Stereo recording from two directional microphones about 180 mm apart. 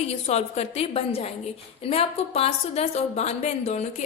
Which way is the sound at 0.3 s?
35° left (ahead or behind).